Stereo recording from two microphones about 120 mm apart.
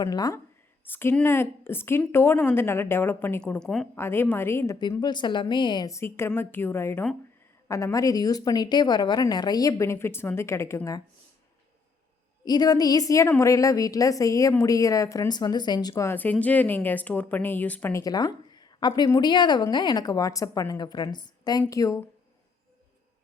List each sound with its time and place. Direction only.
0.0 s a woman's voice: 30° left (ahead or behind)
0.9 s speech: 15° left (ahead or behind)
3.6 s a woman's voice: 5° left (ahead or behind)
3.9 s speech: 20° left (ahead or behind)
4.8 s a woman's voice: 35° left (ahead or behind)
5.9 s speech: 20° left (ahead or behind)
12.5 s a woman's voice: 35° left (ahead or behind)
16.0 s speech: 15° left (ahead or behind)
17.9 s a woman's voice: 30° left (ahead or behind)